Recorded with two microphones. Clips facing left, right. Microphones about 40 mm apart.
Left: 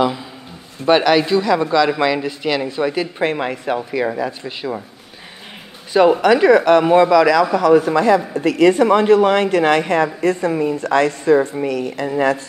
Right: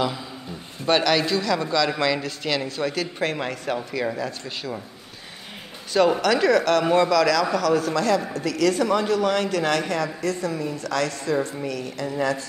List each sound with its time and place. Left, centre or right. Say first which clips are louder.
0.8 s speech: left 7 dB; centre
6.2 s speech: left 7 dB; left